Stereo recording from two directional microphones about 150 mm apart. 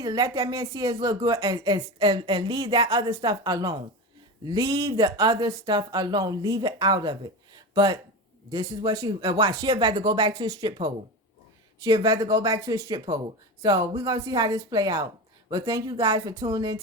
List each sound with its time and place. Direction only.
0.0 s a woman's voice: 25° right (ahead or behind)